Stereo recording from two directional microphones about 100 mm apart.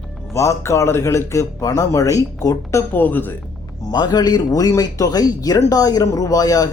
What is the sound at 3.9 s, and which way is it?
Speech, 45° left (ahead or behind).